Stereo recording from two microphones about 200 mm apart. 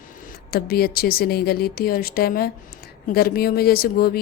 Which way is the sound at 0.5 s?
50° left (ahead or behind).